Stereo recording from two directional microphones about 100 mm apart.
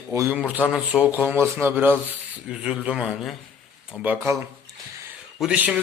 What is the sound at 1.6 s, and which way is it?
Speech, 20° right (ahead or behind).